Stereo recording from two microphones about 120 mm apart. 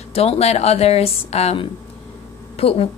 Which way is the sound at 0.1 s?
55° left (ahead or behind).